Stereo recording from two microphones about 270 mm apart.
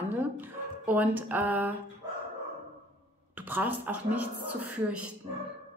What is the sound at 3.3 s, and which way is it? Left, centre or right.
A woman's voice, centre.